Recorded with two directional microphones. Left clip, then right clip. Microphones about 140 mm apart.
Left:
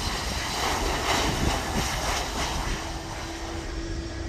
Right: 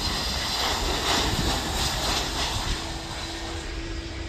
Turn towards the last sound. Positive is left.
turn(degrees=15)  # may be behind; listen again after turning